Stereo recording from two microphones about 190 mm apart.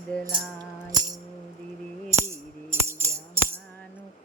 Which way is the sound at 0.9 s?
20° right (ahead or behind).